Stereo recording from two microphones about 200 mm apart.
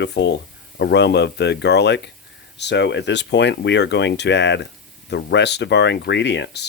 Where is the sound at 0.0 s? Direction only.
60° left (ahead or behind).